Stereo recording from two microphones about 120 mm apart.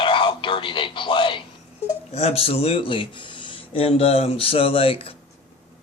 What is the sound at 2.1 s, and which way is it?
Speech, 55° left (ahead or behind).